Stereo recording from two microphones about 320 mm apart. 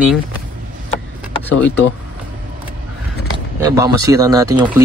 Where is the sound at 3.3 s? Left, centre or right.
Centre.